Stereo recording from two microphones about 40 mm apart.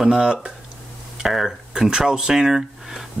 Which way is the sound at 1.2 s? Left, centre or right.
Centre.